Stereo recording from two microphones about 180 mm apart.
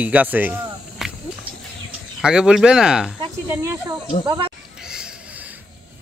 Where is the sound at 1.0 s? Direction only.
Centre (ahead or behind).